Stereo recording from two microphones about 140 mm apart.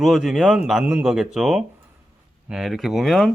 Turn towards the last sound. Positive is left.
turn(degrees=0)  # may be behind; listen again after turning